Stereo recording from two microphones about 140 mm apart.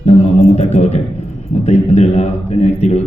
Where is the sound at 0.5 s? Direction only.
55° left (ahead or behind).